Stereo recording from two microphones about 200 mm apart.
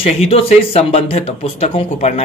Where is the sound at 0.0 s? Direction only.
30° left (ahead or behind).